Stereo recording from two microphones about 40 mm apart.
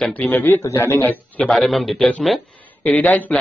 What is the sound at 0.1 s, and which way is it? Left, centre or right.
Speech, left.